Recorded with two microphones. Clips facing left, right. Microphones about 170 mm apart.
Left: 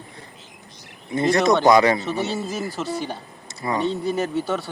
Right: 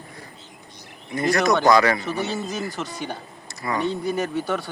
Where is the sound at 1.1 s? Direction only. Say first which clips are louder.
Left 2 dB; 25° left (ahead or behind).